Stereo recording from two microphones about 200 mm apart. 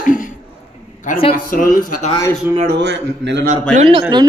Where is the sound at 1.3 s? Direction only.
45° left (ahead or behind).